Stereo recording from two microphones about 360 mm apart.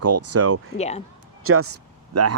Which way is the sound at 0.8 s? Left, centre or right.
Centre.